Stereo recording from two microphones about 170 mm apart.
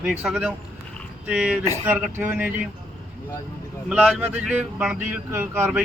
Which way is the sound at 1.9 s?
10° right (ahead or behind).